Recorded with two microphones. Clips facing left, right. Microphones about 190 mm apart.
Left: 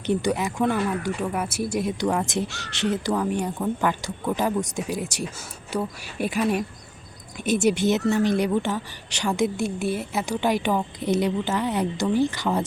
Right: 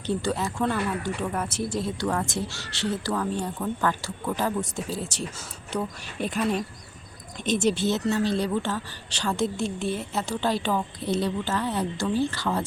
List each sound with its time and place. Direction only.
0.0 s a woman's voice: 15° left (ahead or behind)